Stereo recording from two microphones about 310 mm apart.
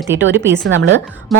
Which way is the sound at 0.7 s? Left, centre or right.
Right.